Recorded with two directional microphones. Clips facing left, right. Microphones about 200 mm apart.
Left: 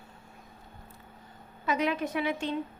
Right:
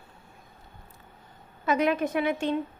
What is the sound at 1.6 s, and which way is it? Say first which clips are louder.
Speech: right 4 dB; 50° right (ahead or behind).